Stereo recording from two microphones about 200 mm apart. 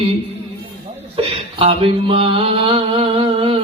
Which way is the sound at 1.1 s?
25° right (ahead or behind).